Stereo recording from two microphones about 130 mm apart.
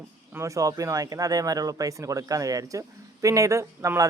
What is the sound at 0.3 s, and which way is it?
Speech, 25° right (ahead or behind).